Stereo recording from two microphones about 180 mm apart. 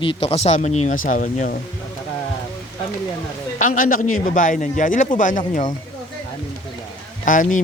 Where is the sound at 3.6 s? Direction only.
50° left (ahead or behind).